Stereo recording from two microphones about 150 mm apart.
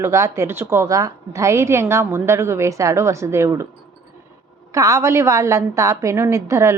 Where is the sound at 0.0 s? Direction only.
20° right (ahead or behind).